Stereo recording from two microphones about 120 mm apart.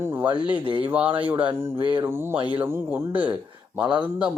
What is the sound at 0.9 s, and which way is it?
Speech, 15° right (ahead or behind).